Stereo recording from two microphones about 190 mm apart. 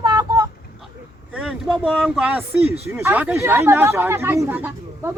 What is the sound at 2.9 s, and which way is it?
Speech, 10° right (ahead or behind).